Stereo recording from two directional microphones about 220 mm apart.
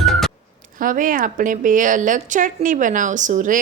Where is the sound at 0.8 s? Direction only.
35° right (ahead or behind).